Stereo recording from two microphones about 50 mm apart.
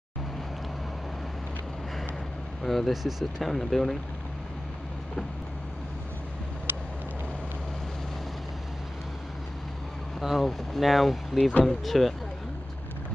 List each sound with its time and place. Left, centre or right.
2.6 s speech: centre
3.4 s speech: centre
10.2 s speech: centre